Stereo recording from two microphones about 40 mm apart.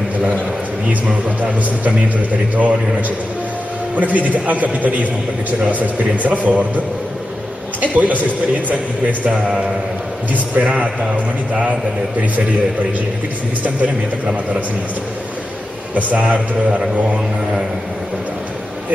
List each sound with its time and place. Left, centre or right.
2.5 s a man's voice: right
3.9 s a man's voice: right
6.1 s a man's voice: right
7.8 s a man's voice: right
9.3 s a man's voice: right
10.6 s a man's voice: right
16.3 s a man's voice: right